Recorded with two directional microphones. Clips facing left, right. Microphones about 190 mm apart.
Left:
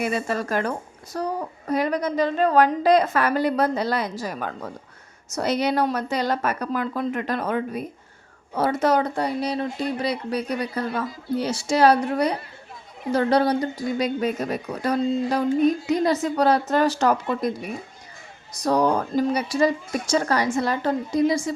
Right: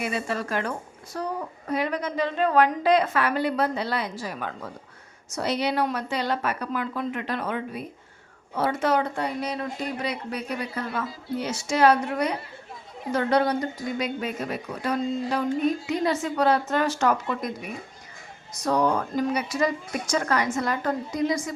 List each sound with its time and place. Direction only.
0.0 s a woman's voice: 40° left (ahead or behind)